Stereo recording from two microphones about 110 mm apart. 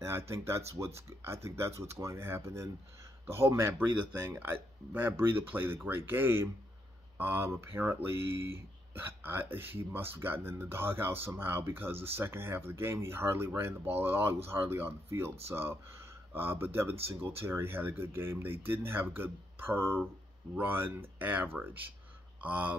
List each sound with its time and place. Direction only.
0.3 s speech: 25° right (ahead or behind)